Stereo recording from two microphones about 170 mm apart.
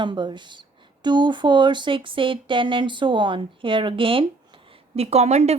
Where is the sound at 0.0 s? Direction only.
25° right (ahead or behind).